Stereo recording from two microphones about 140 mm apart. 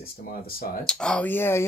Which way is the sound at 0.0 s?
90° left.